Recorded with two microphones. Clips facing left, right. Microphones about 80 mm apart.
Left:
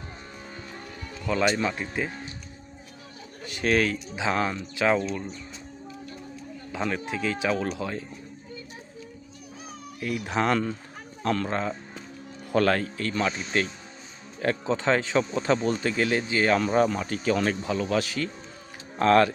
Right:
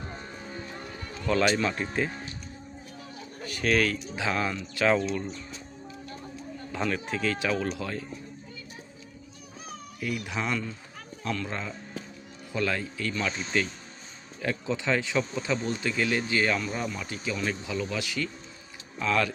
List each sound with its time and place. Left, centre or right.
1.5 s speech: centre
3.4 s speech: left
6.7 s speech: centre
10.4 s speech: left
12.5 s speech: left
16.6 s speech: left
18.9 s speech: left